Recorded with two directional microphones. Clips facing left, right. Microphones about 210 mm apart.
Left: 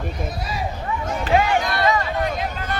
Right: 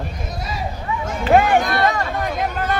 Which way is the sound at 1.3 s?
50° right (ahead or behind).